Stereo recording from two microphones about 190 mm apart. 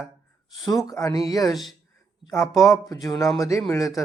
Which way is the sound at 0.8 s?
20° left (ahead or behind).